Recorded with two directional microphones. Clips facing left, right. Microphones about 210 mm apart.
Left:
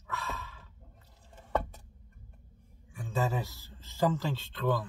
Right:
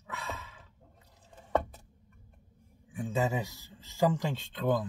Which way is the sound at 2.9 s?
20° right (ahead or behind).